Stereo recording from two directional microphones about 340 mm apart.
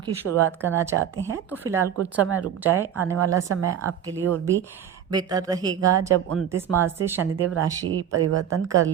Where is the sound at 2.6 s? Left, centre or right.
Centre.